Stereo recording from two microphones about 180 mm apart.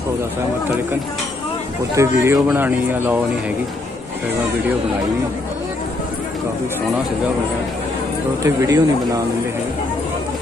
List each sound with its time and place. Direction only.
2.0 s speech: 15° right (ahead or behind)
8.4 s speech: 15° right (ahead or behind)